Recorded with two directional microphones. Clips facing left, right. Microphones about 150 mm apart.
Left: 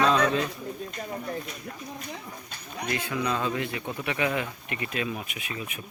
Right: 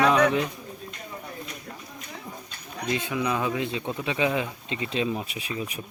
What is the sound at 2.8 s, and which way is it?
Speech, 20° right (ahead or behind).